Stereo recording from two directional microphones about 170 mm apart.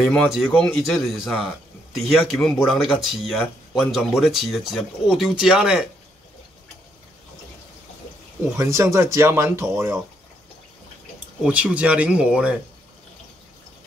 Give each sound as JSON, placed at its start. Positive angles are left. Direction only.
{"t": 0.0, "sound": "speech", "side_deg": 5}
{"t": 8.5, "sound": "speech", "side_deg": -20}
{"t": 11.4, "sound": "speech", "side_deg": -5}